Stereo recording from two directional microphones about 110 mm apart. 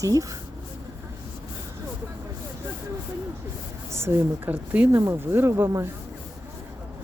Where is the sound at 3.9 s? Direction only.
20° right (ahead or behind).